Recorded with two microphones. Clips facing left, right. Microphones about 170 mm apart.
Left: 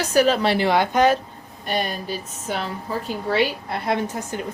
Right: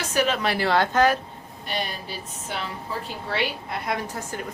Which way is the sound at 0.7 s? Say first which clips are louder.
Left 1 dB; 15° left (ahead or behind).